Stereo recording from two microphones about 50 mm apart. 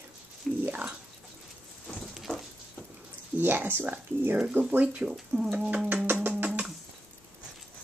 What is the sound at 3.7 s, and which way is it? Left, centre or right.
Speech, right.